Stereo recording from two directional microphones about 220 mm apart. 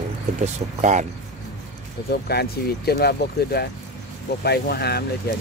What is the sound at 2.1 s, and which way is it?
Speech, 45° left (ahead or behind).